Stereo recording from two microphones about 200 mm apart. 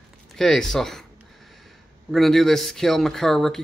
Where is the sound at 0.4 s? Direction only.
Centre (ahead or behind).